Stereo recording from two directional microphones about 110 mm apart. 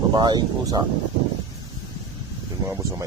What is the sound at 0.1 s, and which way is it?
Speech, 40° right (ahead or behind).